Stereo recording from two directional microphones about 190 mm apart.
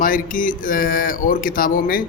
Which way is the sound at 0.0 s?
45° left (ahead or behind).